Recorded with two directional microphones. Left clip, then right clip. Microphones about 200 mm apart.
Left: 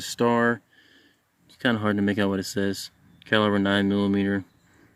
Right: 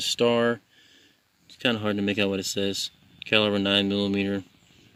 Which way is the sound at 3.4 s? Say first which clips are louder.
Even; 30° left (ahead or behind).